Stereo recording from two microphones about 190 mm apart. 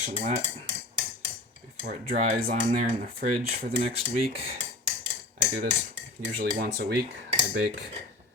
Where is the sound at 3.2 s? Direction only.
65° right (ahead or behind).